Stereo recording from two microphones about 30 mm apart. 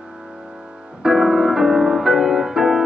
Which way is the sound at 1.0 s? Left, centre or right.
Centre.